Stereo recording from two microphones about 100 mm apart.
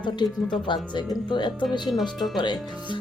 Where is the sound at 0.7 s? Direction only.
50° left (ahead or behind).